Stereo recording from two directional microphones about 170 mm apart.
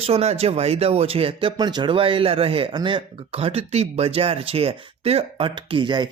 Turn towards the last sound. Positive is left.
turn(degrees=-25)  # may be behind; listen again after turning